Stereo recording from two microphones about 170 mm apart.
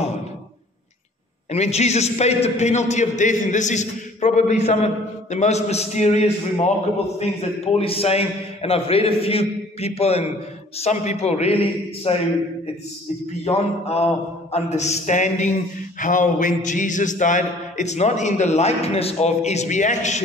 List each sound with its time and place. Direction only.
1.5 s a man's voice: 40° left (ahead or behind)
13.5 s a man's voice: 35° left (ahead or behind)
14.5 s a sound: 40° left (ahead or behind)